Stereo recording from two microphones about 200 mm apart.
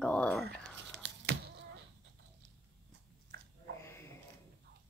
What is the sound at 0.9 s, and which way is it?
Tearing, 60° right (ahead or behind).